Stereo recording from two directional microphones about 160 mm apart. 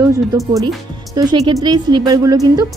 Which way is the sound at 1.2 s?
25° right (ahead or behind).